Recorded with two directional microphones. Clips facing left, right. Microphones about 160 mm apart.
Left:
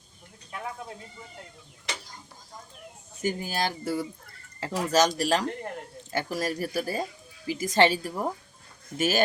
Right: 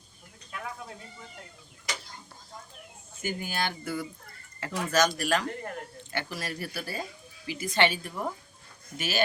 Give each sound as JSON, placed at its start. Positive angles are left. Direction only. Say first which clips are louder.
{"t": 3.2, "sound": "speech", "louder": "left 3 dB", "side_deg": 35}
{"t": 9.0, "sound": "speech", "louder": "left 5 dB", "side_deg": 45}